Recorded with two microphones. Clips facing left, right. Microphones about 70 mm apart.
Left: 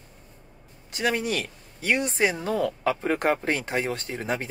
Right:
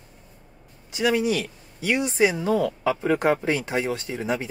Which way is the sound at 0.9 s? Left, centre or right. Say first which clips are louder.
Right 4 dB; left.